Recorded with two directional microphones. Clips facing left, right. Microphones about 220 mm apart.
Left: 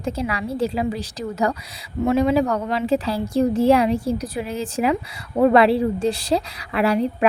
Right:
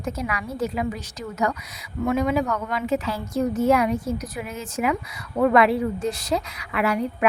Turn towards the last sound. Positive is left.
turn(degrees=30)  # may be behind; listen again after turning